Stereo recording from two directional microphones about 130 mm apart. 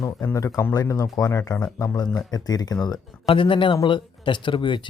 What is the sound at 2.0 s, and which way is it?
Speech, 30° left (ahead or behind).